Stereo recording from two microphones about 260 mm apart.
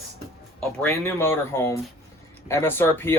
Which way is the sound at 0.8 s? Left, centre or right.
Centre.